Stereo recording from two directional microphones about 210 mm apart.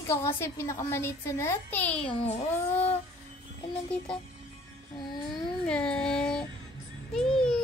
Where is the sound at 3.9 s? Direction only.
5° left (ahead or behind).